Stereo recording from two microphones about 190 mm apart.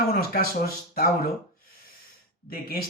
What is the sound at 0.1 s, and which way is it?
Speech, 55° left (ahead or behind).